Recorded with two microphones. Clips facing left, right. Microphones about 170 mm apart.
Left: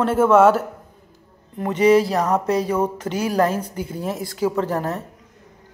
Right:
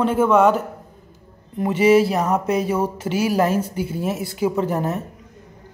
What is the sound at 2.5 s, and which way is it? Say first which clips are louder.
Speech: even; 25° right (ahead or behind).